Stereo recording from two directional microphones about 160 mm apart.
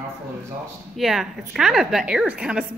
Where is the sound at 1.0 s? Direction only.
5° right (ahead or behind).